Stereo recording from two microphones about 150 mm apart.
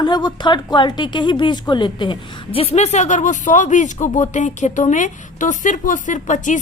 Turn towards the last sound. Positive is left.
turn(degrees=55)  # may be behind; listen again after turning